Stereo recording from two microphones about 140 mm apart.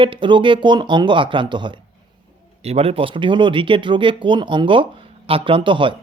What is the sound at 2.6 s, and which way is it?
Speech, 45° right (ahead or behind).